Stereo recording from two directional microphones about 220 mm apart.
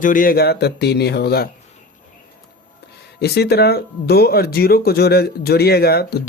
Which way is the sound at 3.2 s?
45° left (ahead or behind).